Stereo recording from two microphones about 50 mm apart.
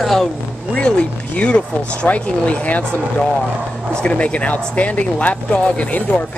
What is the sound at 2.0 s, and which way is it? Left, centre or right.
Speech, left.